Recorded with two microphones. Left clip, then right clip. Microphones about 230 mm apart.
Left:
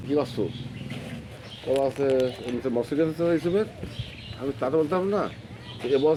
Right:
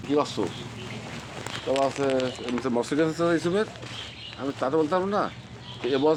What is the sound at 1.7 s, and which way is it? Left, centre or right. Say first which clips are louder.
Speech: left 1 dB; centre.